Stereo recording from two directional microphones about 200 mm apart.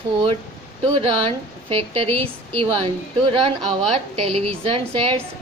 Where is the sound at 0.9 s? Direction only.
30° right (ahead or behind).